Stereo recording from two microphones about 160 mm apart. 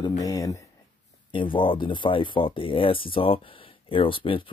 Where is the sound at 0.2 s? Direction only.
20° left (ahead or behind).